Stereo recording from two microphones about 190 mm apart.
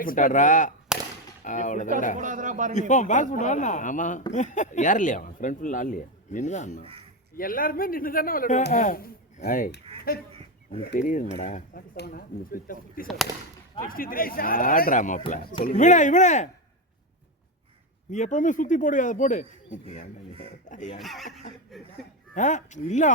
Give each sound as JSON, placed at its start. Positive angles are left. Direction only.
{"t": 0.0, "sound": "speech", "side_deg": 45}
{"t": 0.9, "sound": "a sound", "side_deg": -5}
{"t": 1.5, "sound": "speech", "side_deg": 40}
{"t": 2.1, "sound": "a man's voice", "side_deg": -40}
{"t": 2.7, "sound": "speech", "side_deg": 40}
{"t": 10.8, "sound": "speech", "side_deg": 50}
{"t": 11.9, "sound": "speech", "side_deg": 55}
{"t": 18.1, "sound": "speech", "side_deg": 40}
{"t": 21.0, "sound": "speech", "side_deg": 0}
{"t": 22.4, "sound": "speech", "side_deg": 40}